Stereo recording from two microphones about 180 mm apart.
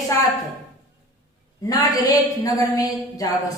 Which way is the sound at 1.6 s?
20° left (ahead or behind).